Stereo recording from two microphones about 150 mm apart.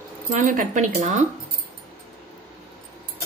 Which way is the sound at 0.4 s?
60° right (ahead or behind).